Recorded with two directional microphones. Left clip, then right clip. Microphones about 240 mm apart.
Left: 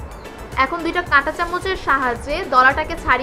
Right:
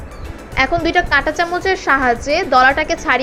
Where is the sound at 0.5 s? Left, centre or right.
Centre.